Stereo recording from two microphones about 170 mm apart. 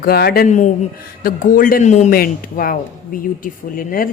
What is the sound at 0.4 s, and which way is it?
Speech, 45° left (ahead or behind).